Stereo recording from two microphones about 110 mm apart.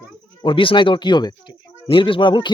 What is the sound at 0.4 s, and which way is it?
A man's voice, 50° left (ahead or behind).